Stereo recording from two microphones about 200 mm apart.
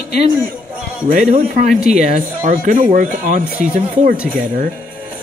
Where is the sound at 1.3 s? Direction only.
40° right (ahead or behind).